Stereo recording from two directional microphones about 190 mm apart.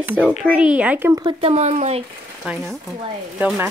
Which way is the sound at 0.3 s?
5° right (ahead or behind).